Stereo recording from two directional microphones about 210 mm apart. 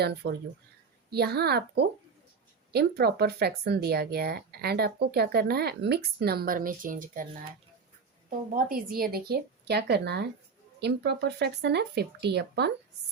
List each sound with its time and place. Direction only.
0.0 s speech: 50° right (ahead or behind)
8.5 s speech: 40° right (ahead or behind)